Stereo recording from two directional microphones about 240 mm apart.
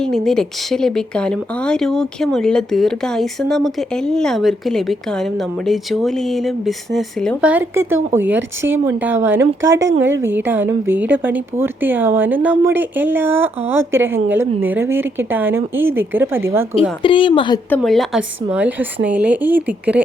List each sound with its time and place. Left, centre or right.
0.0 s a woman's voice: centre
17.0 s a woman's voice: left
17.7 s a woman's voice: centre